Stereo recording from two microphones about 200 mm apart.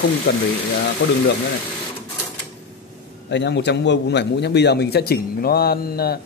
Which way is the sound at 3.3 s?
60° left (ahead or behind).